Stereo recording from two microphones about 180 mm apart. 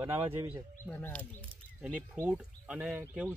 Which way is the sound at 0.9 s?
10° left (ahead or behind).